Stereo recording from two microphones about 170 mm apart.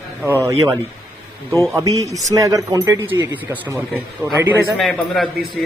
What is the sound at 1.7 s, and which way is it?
A man's voice, 20° right (ahead or behind).